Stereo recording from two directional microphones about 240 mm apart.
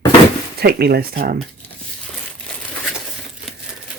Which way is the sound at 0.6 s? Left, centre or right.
Right.